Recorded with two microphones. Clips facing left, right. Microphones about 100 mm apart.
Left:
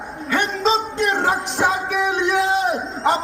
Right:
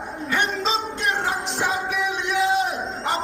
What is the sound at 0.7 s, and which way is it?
Speech, 85° left.